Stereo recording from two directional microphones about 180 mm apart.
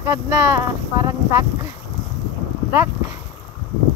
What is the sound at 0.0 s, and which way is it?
Speech, 15° right (ahead or behind).